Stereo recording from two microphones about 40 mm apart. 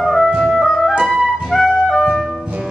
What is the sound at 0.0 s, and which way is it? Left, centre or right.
Music, centre.